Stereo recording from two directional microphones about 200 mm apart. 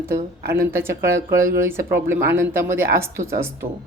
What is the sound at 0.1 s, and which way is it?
Speech, 15° right (ahead or behind).